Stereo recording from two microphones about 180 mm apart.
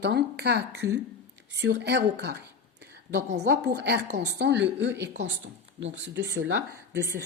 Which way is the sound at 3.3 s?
70° right (ahead or behind).